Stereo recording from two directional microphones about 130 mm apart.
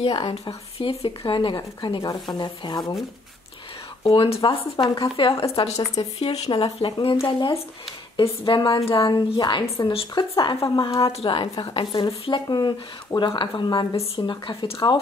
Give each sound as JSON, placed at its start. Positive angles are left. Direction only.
{"t": 0.0, "sound": "speech", "side_deg": 45}
{"t": 4.0, "sound": "speech", "side_deg": 45}
{"t": 11.0, "sound": "speech", "side_deg": 45}